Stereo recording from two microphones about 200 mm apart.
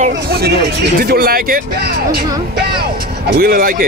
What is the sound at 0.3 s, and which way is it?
Speech, 55° right (ahead or behind).